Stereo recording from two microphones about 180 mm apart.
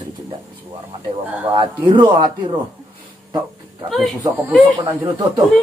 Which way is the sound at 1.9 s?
25° right (ahead or behind).